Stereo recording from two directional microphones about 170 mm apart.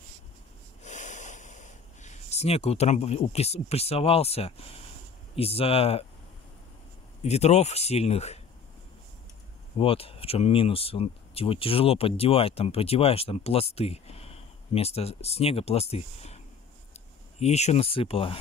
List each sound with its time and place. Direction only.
0.8 s speech: 45° left (ahead or behind)
7.2 s speech: 40° left (ahead or behind)
9.8 s speech: 35° left (ahead or behind)